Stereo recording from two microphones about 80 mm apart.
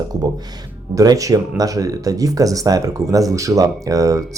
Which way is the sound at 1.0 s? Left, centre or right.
Right.